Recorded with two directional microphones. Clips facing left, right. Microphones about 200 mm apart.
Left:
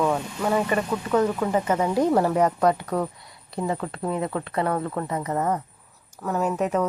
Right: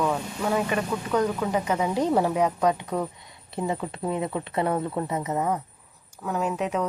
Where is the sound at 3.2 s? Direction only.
20° right (ahead or behind).